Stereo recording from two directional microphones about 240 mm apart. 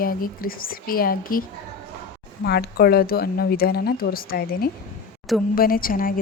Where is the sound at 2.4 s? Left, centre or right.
Left.